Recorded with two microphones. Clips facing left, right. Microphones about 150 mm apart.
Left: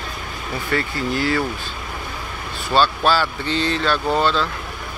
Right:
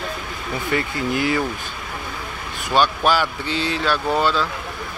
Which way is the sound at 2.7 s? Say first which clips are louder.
Left 1 dB; 15° right (ahead or behind).